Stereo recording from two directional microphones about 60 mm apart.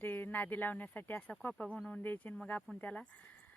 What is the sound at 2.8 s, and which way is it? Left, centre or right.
Speech, centre.